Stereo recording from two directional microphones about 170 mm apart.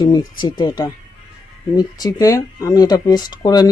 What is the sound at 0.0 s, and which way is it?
Speech, 25° left (ahead or behind).